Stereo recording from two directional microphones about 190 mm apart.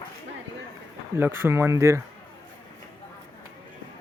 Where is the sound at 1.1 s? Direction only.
10° right (ahead or behind).